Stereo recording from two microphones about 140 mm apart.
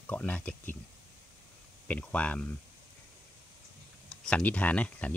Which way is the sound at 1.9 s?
10° left (ahead or behind).